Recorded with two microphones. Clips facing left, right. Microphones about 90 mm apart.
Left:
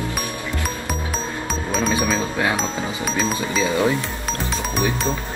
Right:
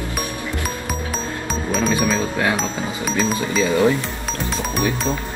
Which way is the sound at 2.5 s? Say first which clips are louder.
Right 1 dB; centre (ahead or behind).